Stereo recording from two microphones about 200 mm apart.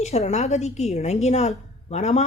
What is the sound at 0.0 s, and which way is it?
A woman's voice, 35° left (ahead or behind).